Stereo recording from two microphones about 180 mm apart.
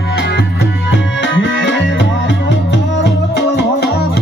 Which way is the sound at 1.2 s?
80° left.